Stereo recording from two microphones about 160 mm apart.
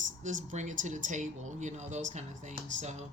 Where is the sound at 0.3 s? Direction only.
50° right (ahead or behind).